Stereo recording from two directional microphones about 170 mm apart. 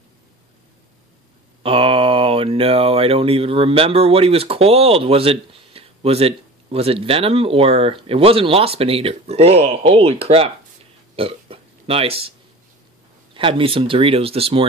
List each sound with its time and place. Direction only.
1.6 s speech: 35° right (ahead or behind)
11.1 s burping: 35° right (ahead or behind)
13.3 s speech: 30° right (ahead or behind)